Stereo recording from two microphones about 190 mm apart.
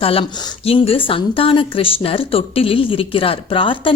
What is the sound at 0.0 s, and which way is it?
A woman's voice, 30° left (ahead or behind).